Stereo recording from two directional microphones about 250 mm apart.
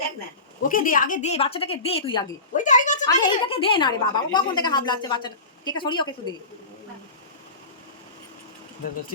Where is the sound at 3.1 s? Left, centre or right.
Centre.